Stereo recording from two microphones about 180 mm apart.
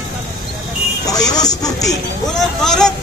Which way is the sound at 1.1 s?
20° left (ahead or behind).